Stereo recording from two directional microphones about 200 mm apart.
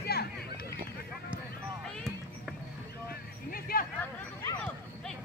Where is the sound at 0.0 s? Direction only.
50° left (ahead or behind).